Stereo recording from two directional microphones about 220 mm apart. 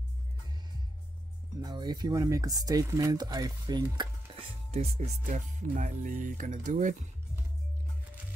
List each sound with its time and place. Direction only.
1.6 s speech: 20° right (ahead or behind)